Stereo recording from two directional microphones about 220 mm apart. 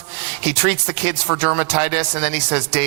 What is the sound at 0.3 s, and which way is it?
A man's voice, 10° right (ahead or behind).